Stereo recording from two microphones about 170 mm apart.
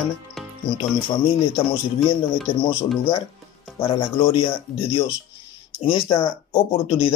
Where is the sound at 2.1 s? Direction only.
30° left (ahead or behind).